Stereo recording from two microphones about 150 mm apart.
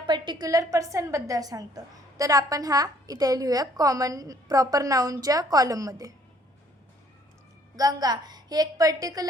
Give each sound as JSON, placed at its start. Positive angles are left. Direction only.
{"t": 0.0, "sound": "a woman's voice", "side_deg": -30}
{"t": 7.8, "sound": "a woman's voice", "side_deg": -25}